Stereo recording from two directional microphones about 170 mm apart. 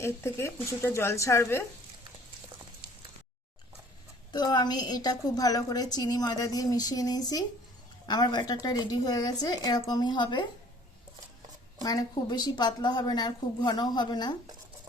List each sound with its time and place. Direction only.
0.0 s speech: 15° left (ahead or behind)
4.3 s a woman's voice: 25° left (ahead or behind)
11.8 s a woman's voice: 20° left (ahead or behind)